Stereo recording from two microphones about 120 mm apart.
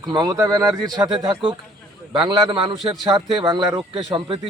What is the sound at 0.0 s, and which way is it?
A man's voice, 35° right (ahead or behind).